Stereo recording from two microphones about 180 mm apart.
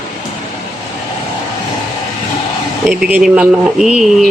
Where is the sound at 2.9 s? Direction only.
10° right (ahead or behind).